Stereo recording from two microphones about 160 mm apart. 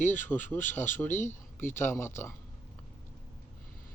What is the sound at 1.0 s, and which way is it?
Speech, 15° left (ahead or behind).